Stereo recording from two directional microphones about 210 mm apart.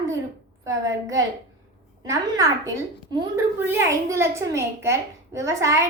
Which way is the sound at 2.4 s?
20° right (ahead or behind).